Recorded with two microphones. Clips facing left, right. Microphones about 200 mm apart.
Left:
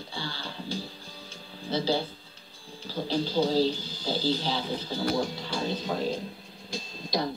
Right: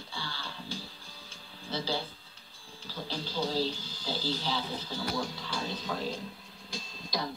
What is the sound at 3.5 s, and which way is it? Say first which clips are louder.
Speech: left 7 dB; 15° left (ahead or behind).